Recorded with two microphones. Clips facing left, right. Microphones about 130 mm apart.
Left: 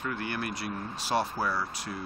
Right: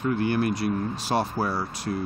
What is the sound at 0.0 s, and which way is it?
Speech, 30° right (ahead or behind).